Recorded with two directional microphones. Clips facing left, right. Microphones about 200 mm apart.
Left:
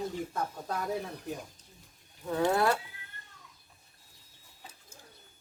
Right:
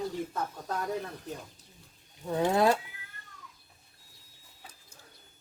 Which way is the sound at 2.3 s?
20° right (ahead or behind).